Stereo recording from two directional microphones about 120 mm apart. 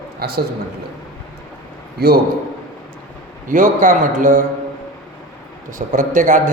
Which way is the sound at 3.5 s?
90° right.